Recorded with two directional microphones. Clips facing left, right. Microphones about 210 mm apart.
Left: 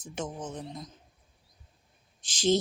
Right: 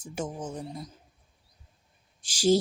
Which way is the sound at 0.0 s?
10° right (ahead or behind).